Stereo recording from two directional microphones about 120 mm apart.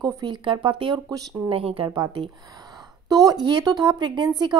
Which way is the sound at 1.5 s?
50° right (ahead or behind).